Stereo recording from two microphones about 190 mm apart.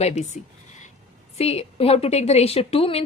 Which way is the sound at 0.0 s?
35° left (ahead or behind).